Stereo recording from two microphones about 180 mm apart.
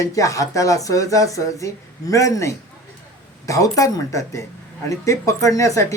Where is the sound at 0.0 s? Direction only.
20° left (ahead or behind).